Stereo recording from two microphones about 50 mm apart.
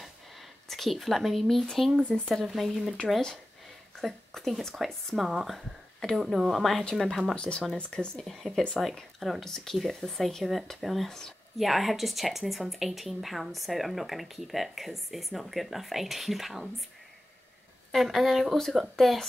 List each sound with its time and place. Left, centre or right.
0.7 s a woman's voice: centre
2.7 s speech: centre
4.0 s a woman's voice: centre
7.3 s speech: left
8.2 s a woman's voice: centre
17.9 s a woman's voice: centre